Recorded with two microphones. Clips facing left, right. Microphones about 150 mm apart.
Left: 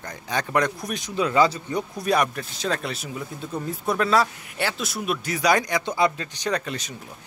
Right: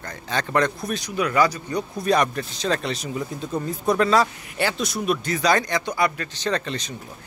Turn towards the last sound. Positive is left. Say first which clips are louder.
# right 1 dB
turn(degrees=10)  # may be behind; listen again after turning